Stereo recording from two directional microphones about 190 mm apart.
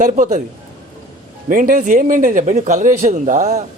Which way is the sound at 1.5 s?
45° right (ahead or behind).